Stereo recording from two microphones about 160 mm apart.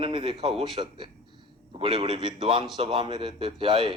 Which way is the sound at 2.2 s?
30° right (ahead or behind).